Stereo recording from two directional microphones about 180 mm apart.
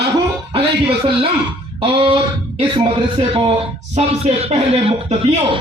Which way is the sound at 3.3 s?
30° right (ahead or behind).